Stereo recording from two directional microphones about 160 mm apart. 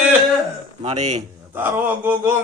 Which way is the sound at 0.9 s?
45° right (ahead or behind).